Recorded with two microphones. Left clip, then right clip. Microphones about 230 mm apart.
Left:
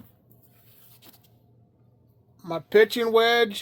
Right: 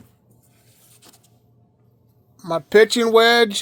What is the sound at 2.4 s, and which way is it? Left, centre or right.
Speech, right.